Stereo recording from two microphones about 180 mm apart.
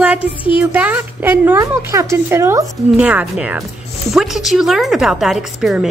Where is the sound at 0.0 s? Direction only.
10° right (ahead or behind).